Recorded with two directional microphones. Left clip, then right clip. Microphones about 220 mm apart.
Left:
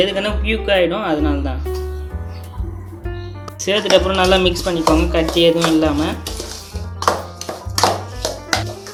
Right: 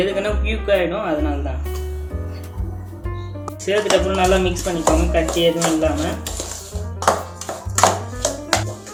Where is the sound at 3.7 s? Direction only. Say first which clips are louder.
Left 3 dB; 30° left (ahead or behind).